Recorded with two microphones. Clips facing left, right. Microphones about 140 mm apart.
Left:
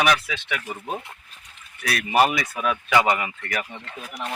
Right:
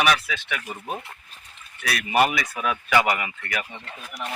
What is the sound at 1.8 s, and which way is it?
Speech, 35° left (ahead or behind).